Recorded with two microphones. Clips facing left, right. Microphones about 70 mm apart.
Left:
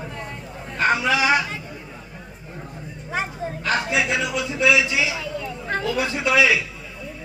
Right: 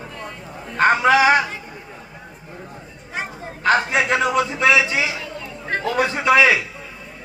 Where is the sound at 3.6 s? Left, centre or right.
Right.